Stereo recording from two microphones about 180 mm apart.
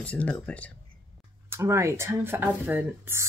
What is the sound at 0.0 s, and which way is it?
Speech, 10° left (ahead or behind).